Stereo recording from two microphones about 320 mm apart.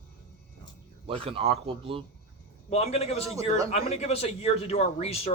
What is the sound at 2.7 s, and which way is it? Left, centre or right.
A man's voice, centre.